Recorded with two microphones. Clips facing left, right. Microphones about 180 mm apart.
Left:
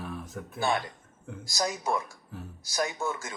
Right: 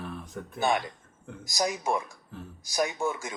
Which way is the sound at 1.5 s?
15° right (ahead or behind).